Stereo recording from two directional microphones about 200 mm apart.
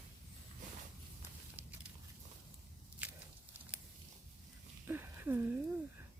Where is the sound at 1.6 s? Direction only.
10° right (ahead or behind).